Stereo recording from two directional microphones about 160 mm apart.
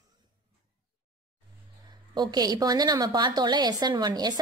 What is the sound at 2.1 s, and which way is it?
A woman's voice, 25° right (ahead or behind).